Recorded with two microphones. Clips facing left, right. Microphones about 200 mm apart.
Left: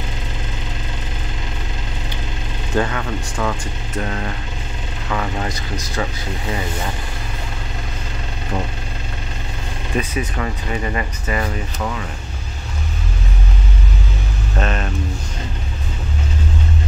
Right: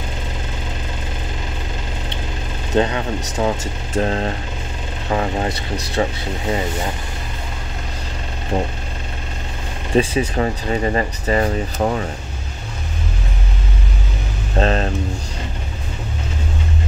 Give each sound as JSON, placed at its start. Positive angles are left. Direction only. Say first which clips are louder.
{"t": 2.7, "sound": "speech", "louder": "right 3 dB", "side_deg": -20}
{"t": 5.5, "sound": "speech", "louder": "right 2 dB", "side_deg": -65}
{"t": 9.9, "sound": "speech", "louder": "right 6 dB", "side_deg": -30}
{"t": 14.6, "sound": "speech", "louder": "right 5 dB", "side_deg": -30}